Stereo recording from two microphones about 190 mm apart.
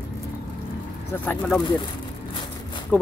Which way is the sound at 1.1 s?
10° left (ahead or behind).